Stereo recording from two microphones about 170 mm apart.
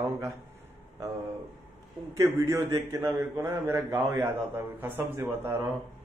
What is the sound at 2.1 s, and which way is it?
A man's voice, 20° right (ahead or behind).